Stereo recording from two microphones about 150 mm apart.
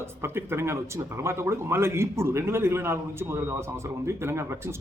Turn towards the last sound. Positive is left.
turn(degrees=-15)  # may be behind; listen again after turning